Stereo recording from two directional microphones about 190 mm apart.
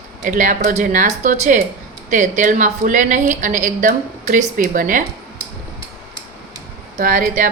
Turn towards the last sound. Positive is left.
turn(degrees=-45)  # may be behind; listen again after turning